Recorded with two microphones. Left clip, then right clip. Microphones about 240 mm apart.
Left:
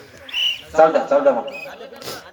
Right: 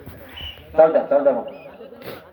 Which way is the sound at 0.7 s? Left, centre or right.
Left.